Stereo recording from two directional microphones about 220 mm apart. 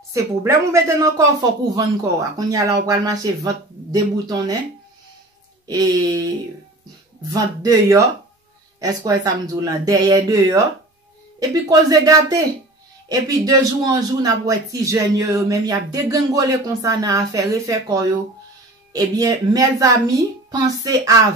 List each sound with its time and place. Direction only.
0.1 s a man's voice: 15° right (ahead or behind)
5.7 s a man's voice: 15° right (ahead or behind)
7.3 s a man's voice: 15° right (ahead or behind)